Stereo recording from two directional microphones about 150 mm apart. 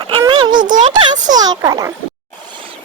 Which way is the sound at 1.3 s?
25° right (ahead or behind).